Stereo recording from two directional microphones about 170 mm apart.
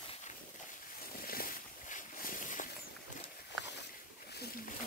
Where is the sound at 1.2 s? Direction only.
60° left (ahead or behind).